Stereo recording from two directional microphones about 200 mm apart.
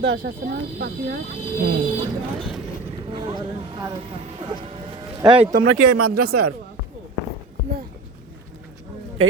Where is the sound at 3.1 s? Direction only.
25° right (ahead or behind).